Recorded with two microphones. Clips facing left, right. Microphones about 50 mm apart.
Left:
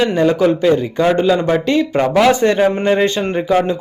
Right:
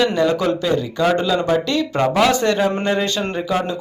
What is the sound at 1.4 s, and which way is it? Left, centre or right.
Speech, left.